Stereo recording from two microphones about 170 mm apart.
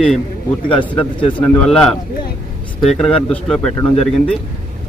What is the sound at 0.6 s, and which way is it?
Speech, 30° left (ahead or behind).